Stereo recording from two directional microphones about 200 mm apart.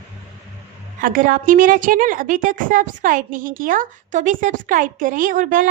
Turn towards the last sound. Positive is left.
turn(degrees=-40)  # may be behind; listen again after turning